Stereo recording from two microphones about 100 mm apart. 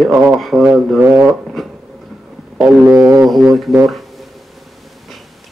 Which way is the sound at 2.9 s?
20° right (ahead or behind).